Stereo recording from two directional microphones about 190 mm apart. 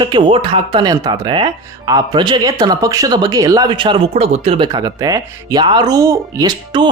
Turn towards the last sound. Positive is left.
turn(degrees=-25)  # may be behind; listen again after turning